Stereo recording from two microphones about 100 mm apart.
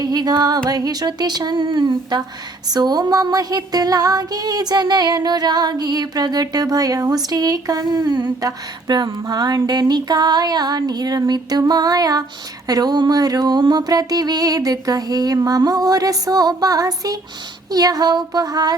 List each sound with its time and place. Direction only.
0.0 s female singing: 40° right (ahead or behind)
0.7 s speech: 40° right (ahead or behind)
2.6 s female singing: 45° right (ahead or behind)